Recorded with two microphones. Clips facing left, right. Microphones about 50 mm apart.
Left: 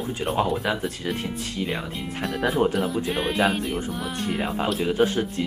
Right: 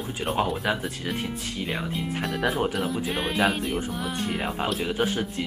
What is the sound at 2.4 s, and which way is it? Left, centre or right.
Speech, centre.